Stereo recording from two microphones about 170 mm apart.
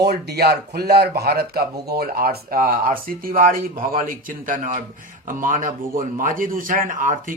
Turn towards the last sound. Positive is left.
turn(degrees=-50)  # may be behind; listen again after turning